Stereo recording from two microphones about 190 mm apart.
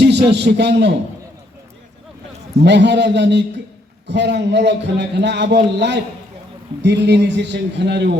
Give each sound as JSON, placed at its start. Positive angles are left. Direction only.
{"t": 0.0, "sound": "a man's voice", "side_deg": -60}
{"t": 2.6, "sound": "a man's voice", "side_deg": -65}